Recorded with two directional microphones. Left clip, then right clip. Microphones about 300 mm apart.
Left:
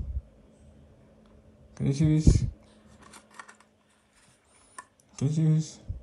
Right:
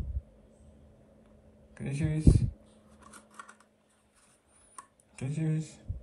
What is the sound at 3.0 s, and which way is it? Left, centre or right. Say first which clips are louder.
Typing: left 2 dB; centre.